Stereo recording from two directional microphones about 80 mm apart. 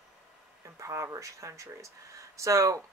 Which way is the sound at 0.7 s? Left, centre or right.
Right.